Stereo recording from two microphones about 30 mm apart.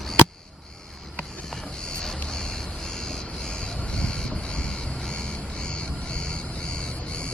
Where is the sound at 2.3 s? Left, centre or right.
Left.